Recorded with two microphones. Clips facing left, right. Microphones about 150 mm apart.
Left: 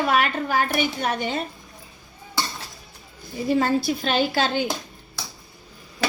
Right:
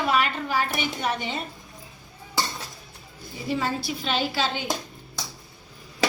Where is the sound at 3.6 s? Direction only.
50° left (ahead or behind).